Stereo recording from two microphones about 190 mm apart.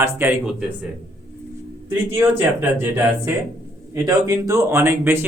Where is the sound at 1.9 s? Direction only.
10° right (ahead or behind).